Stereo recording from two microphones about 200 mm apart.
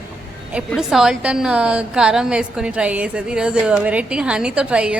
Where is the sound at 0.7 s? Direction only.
Centre (ahead or behind).